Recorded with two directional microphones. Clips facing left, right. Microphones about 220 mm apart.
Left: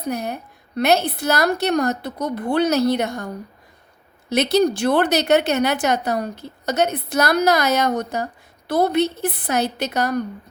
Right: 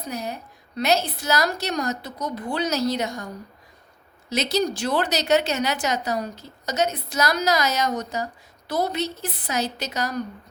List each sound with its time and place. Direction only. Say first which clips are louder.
0.0 s speech: left 5 dB; 60° left (ahead or behind)